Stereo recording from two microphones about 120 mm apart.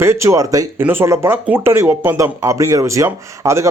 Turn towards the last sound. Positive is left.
turn(degrees=-25)  # may be behind; listen again after turning